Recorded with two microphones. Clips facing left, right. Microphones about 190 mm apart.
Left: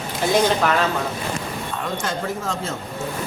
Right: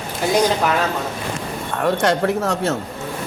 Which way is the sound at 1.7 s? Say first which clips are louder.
Right 10 dB; 65° right (ahead or behind).